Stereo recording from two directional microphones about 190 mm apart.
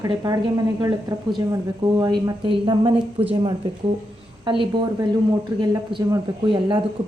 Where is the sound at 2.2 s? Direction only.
25° right (ahead or behind).